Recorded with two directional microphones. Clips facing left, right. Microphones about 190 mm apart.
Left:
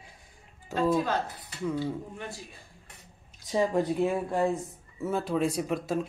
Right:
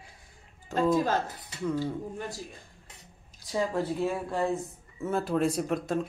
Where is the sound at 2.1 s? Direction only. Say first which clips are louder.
Right 3 dB; 40° right (ahead or behind).